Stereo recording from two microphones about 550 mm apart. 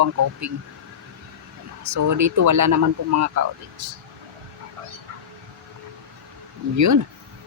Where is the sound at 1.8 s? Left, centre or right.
Right.